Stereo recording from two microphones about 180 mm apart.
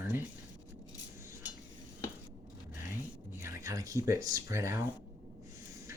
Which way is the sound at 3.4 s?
15° right (ahead or behind).